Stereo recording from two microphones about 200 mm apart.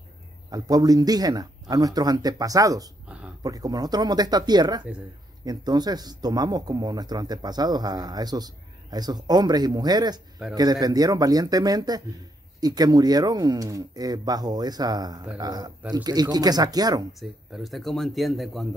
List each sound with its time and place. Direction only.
0.5 s speech: 20° right (ahead or behind)
17.2 s speech: centre (ahead or behind)